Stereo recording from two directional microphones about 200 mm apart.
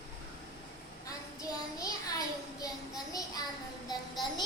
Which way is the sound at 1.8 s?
15° left (ahead or behind).